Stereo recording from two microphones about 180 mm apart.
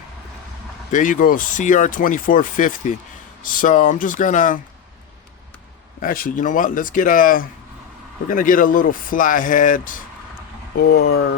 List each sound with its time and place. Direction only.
0.9 s speech: 45° left (ahead or behind)
6.0 s speech: 50° left (ahead or behind)
10.8 s speech: 60° left (ahead or behind)